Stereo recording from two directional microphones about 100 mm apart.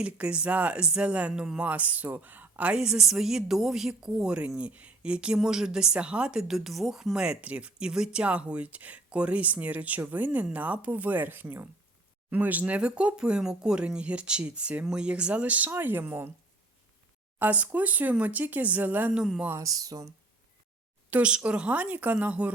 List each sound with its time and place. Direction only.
0.0 s speech: 10° right (ahead or behind)
17.4 s speech: 15° right (ahead or behind)
19.5 s speech: 35° right (ahead or behind)
21.1 s speech: 10° right (ahead or behind)